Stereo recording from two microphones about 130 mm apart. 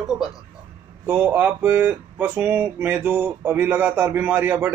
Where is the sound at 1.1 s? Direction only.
15° right (ahead or behind).